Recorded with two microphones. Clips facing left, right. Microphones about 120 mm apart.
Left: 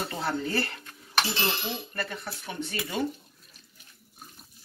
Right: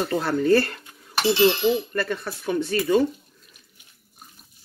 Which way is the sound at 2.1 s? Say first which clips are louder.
Right 11 dB; 90° right.